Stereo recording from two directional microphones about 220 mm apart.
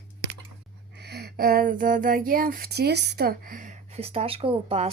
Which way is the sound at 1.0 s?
50° right (ahead or behind).